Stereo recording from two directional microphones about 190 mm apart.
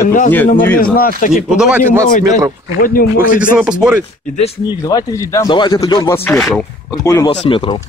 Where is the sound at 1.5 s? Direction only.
5° right (ahead or behind).